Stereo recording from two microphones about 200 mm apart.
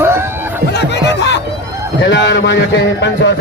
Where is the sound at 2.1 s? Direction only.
60° left (ahead or behind).